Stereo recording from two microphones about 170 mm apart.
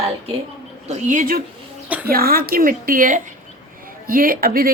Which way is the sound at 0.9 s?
45° right (ahead or behind).